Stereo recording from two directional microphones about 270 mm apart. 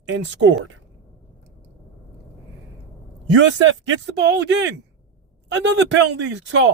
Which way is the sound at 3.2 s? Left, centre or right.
Right.